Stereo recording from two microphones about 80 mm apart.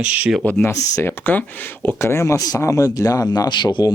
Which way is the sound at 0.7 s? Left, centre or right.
Left.